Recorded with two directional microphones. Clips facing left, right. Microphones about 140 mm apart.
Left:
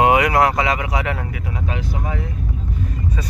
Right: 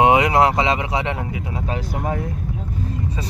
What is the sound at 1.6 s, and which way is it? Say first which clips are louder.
Vehicle: right 1 dB; 40° right (ahead or behind).